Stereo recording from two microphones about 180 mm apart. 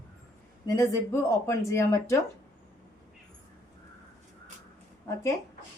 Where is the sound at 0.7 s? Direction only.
15° left (ahead or behind).